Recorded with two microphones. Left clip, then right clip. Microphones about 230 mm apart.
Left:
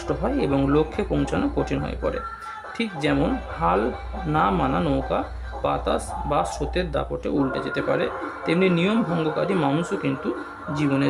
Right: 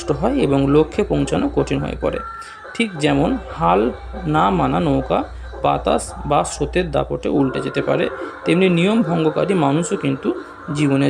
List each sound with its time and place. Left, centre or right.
0.1 s speech: centre